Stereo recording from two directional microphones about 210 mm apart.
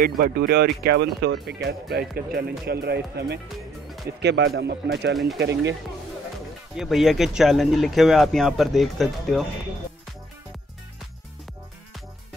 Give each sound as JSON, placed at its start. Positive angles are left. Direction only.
{"t": 0.0, "sound": "speech", "side_deg": -45}
{"t": 6.8, "sound": "speech", "side_deg": 0}